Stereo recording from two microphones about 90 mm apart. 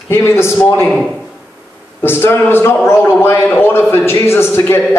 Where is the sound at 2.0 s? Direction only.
25° left (ahead or behind).